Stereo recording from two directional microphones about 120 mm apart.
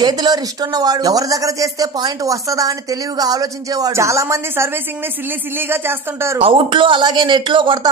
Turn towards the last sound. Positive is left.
turn(degrees=-45)  # may be behind; listen again after turning